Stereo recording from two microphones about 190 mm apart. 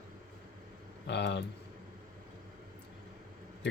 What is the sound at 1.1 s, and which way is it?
Speech, 65° left (ahead or behind).